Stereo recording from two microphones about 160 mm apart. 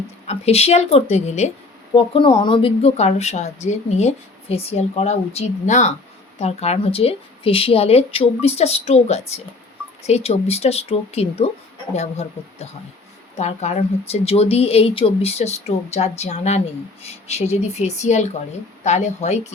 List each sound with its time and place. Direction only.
0.3 s speech: 40° left (ahead or behind)